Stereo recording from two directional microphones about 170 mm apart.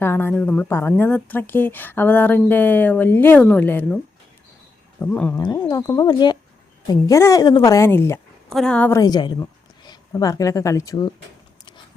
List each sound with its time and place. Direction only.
0.0 s a woman's voice: 15° left (ahead or behind)
5.4 s a woman's voice: 25° left (ahead or behind)
8.4 s a woman's voice: 5° left (ahead or behind)
9.0 s speech: 25° left (ahead or behind)